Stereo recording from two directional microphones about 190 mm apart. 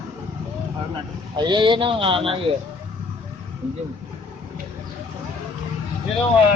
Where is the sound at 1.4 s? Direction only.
25° right (ahead or behind).